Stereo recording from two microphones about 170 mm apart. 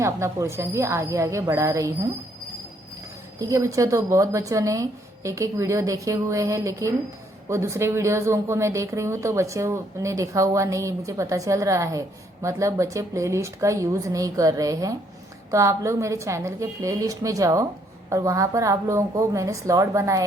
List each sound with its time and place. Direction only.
0.0 s a woman's voice: 15° right (ahead or behind)
3.3 s a woman's voice: 20° right (ahead or behind)